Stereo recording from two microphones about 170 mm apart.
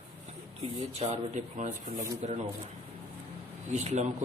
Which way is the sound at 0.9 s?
40° right (ahead or behind).